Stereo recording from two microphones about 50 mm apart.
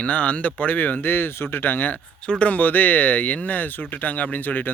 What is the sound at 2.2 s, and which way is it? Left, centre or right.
Speech, left.